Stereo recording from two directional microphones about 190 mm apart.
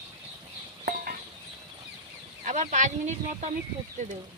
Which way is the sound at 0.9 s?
50° right (ahead or behind).